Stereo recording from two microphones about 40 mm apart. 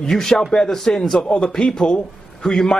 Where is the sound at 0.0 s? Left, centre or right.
Centre.